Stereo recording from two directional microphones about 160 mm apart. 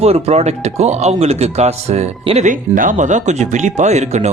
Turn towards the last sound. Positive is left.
turn(degrees=-45)  # may be behind; listen again after turning